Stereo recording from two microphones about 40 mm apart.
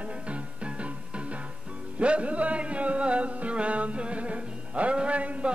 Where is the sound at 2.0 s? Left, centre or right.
Right.